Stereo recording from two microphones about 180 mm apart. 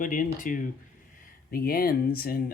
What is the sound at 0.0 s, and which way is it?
Speech, 45° left (ahead or behind).